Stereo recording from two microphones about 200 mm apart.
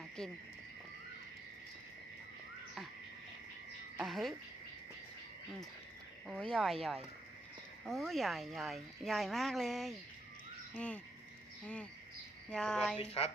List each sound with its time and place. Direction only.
0.2 s speech: centre (ahead or behind)
3.9 s a woman's voice: centre (ahead or behind)
6.2 s speech: centre (ahead or behind)
13.0 s a woman's voice: 30° left (ahead or behind)